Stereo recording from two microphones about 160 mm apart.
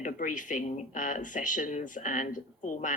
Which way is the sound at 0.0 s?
55° left (ahead or behind).